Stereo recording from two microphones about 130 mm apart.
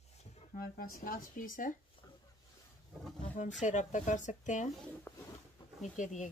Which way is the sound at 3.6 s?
70° left (ahead or behind).